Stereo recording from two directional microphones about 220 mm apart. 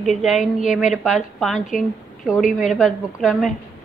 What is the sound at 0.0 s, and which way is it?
A woman's voice, centre (ahead or behind).